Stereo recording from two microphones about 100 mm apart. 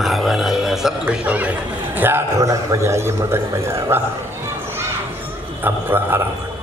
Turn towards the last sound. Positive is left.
turn(degrees=-20)  # may be behind; listen again after turning